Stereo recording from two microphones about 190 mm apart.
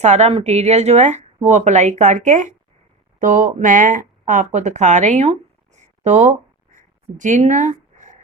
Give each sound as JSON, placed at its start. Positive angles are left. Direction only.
{"t": 0.0, "sound": "speech", "side_deg": -35}